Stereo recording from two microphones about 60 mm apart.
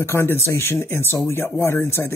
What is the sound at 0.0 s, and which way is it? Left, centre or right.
Speech, left.